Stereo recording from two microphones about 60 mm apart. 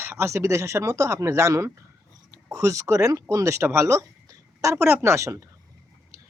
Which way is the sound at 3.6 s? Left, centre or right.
Right.